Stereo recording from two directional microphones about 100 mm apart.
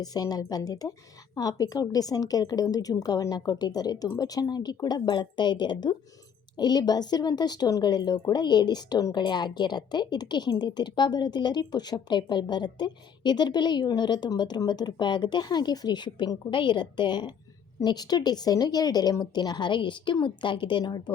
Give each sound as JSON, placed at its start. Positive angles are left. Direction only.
{"t": 0.0, "sound": "a woman's voice", "side_deg": 40}